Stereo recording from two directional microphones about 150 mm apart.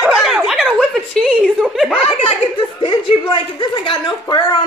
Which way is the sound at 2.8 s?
30° left (ahead or behind).